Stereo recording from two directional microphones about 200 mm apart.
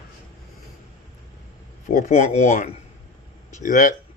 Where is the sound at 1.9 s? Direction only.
35° left (ahead or behind).